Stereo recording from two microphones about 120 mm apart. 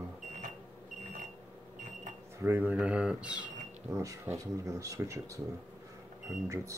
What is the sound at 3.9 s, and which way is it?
Speech, 25° right (ahead or behind).